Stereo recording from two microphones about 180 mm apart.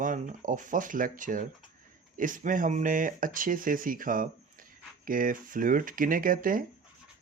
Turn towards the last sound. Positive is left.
turn(degrees=-50)  # may be behind; listen again after turning